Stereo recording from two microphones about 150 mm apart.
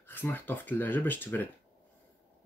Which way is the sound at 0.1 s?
15° left (ahead or behind).